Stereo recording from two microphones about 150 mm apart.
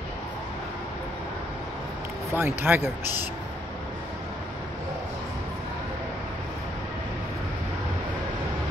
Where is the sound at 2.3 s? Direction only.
15° right (ahead or behind).